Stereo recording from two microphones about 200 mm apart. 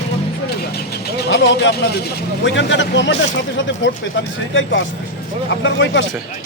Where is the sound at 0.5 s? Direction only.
55° left (ahead or behind).